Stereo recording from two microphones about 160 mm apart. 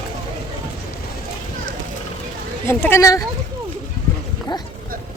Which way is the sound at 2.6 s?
15° left (ahead or behind).